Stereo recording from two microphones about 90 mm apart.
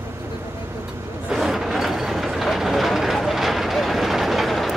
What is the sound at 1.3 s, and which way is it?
Vehicle, 5° right (ahead or behind).